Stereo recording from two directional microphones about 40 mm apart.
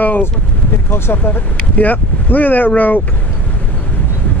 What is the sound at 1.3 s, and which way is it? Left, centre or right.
Speech, left.